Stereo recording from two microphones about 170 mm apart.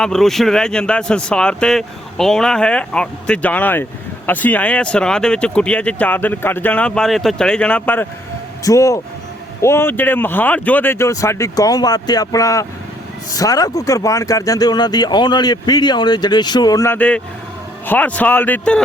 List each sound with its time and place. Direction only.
0.0 s speech: 5° left (ahead or behind)